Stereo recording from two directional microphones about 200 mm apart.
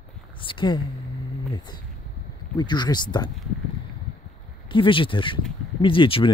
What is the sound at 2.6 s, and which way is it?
Speech, 20° left (ahead or behind).